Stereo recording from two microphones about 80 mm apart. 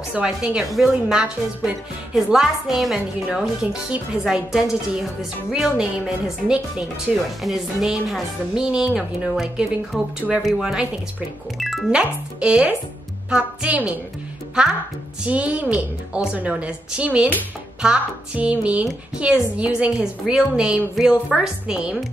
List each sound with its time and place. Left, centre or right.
0.1 s speech: centre
11.9 s speech: centre